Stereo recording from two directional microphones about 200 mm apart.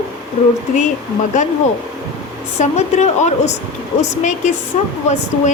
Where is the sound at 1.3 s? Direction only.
40° left (ahead or behind).